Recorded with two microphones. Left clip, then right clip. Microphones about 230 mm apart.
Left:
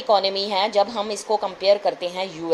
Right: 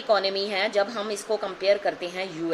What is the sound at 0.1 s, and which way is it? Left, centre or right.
A woman's voice, centre.